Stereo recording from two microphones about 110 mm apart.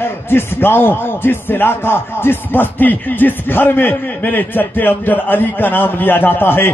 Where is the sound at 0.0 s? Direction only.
20° left (ahead or behind).